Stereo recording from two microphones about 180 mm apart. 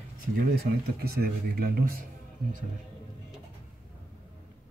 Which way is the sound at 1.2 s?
55° right (ahead or behind).